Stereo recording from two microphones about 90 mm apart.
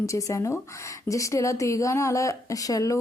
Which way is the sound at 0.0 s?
35° left (ahead or behind).